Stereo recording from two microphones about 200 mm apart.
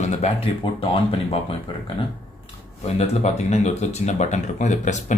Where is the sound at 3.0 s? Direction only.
35° left (ahead or behind).